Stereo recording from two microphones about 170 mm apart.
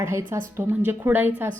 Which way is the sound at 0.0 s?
15° right (ahead or behind).